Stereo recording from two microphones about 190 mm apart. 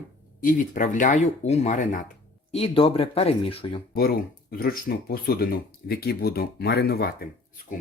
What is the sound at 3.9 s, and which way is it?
Speech, 50° left (ahead or behind).